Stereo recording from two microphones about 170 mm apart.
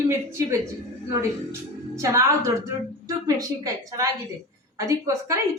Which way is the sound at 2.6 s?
20° right (ahead or behind).